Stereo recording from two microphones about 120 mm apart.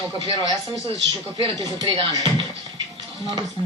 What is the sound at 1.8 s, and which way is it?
Speech, 45° right (ahead or behind).